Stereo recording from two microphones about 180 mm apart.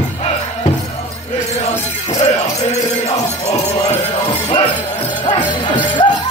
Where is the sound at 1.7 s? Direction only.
15° left (ahead or behind).